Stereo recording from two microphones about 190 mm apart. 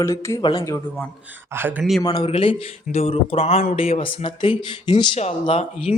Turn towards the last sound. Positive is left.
turn(degrees=35)  # may be behind; listen again after turning